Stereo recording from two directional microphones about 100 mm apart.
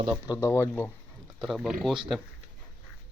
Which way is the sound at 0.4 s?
25° left (ahead or behind).